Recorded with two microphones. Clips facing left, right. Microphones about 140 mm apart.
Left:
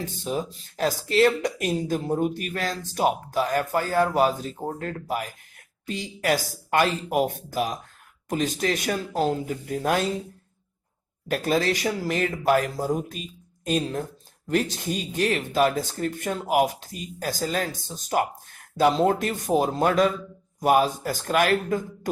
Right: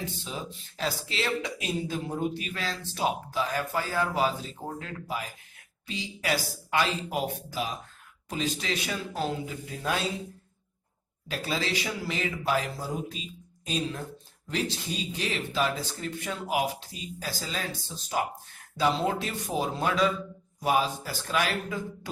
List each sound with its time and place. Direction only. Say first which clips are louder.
0.3 s speech: left 9 dB; 45° left (ahead or behind)
11.3 s speech: left 8 dB; 50° left (ahead or behind)